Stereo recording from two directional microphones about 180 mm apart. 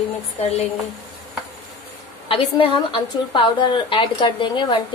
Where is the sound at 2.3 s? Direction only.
30° left (ahead or behind).